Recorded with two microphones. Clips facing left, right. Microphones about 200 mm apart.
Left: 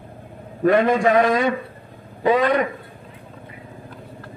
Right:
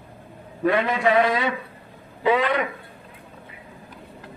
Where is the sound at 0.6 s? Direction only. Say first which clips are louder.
Left 5 dB; 45° left (ahead or behind).